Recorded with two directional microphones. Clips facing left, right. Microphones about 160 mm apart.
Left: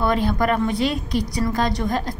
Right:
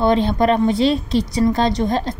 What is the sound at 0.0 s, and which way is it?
A woman's voice, 25° right (ahead or behind).